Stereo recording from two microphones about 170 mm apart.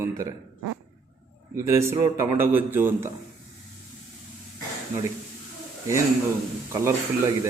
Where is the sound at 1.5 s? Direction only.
15° right (ahead or behind).